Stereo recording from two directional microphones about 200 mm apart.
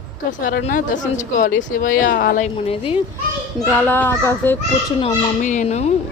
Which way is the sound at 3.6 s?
5° left (ahead or behind).